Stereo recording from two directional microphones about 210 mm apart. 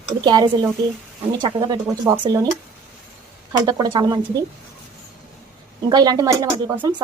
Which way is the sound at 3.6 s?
20° right (ahead or behind).